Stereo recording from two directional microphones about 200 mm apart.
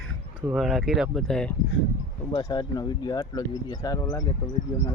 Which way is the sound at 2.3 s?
20° left (ahead or behind).